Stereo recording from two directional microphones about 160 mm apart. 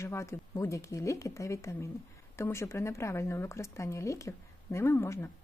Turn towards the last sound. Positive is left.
turn(degrees=15)  # may be behind; listen again after turning